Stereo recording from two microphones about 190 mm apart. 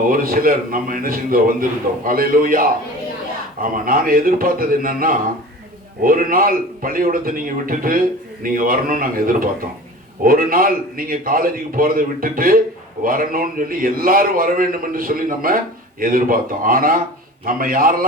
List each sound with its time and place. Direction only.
0.0 s a man's voice: 50° right (ahead or behind)